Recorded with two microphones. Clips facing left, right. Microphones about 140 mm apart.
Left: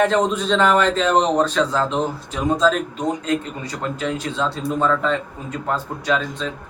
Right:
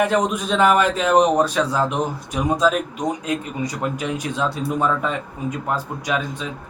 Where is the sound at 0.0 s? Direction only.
10° right (ahead or behind).